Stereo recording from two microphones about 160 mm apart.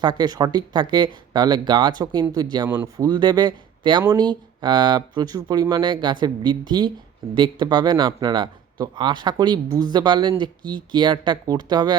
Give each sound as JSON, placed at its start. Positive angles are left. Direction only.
{"t": 0.0, "sound": "a man's voice", "side_deg": -25}